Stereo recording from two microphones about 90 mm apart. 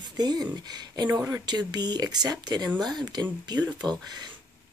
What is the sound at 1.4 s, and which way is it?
A woman's voice, 50° right (ahead or behind).